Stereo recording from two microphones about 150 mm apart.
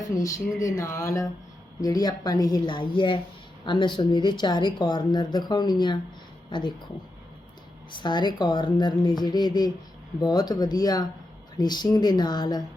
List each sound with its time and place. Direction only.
0.2 s speech: 20° left (ahead or behind)
7.9 s speech: 30° left (ahead or behind)